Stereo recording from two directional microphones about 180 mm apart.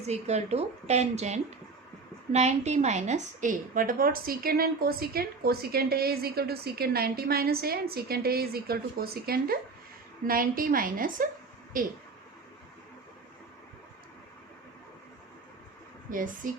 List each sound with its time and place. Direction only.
0.0 s a woman's voice: 35° right (ahead or behind)
16.0 s a woman's voice: 50° right (ahead or behind)